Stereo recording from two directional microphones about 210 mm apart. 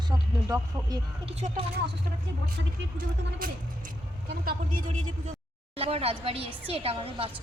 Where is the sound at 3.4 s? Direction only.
45° right (ahead or behind).